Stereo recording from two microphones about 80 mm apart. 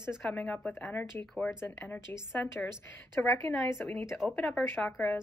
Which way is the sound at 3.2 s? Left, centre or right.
Centre.